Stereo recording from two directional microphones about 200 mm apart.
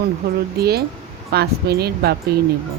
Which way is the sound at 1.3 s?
55° right (ahead or behind).